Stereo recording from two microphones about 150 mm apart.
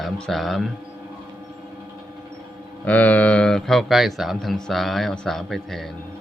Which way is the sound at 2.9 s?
10° left (ahead or behind).